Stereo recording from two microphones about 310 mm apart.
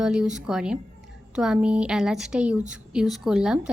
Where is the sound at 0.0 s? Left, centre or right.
Centre.